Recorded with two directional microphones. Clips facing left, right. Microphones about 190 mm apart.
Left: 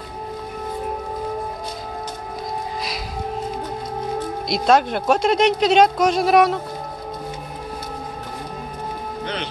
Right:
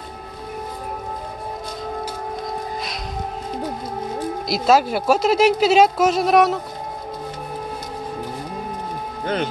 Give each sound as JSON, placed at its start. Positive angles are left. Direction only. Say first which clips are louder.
{"t": 4.5, "sound": "speech", "louder": "even", "side_deg": -5}
{"t": 9.2, "sound": "speech", "louder": "right 7 dB", "side_deg": -45}